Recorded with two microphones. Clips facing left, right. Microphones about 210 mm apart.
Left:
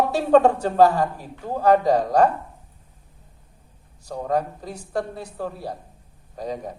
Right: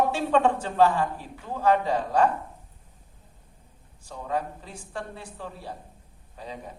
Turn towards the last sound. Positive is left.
turn(degrees=40)  # may be behind; listen again after turning